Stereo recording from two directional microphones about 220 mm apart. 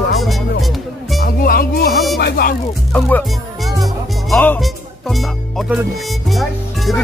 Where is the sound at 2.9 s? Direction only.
5° left (ahead or behind).